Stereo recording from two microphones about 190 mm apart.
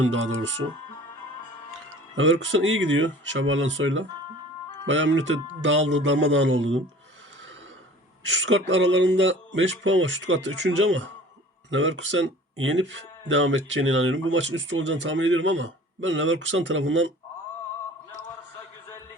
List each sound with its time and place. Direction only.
0.0 s speech: 90° right
2.1 s speech: 90° right
8.3 s speech: 75° right (ahead or behind)